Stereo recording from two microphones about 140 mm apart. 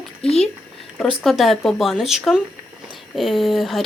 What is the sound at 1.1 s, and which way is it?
Speech, centre (ahead or behind).